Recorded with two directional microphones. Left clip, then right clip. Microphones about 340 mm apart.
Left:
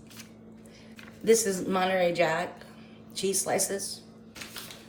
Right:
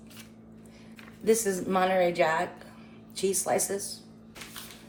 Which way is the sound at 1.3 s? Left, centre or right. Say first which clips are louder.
Left 2 dB; centre.